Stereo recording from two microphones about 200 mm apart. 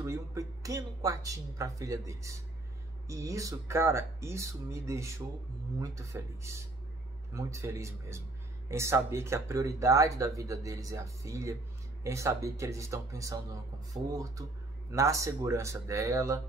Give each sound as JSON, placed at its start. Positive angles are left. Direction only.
{"t": 0.0, "sound": "speech", "side_deg": -15}